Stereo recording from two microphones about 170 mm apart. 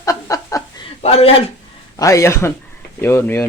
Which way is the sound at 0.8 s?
35° left (ahead or behind).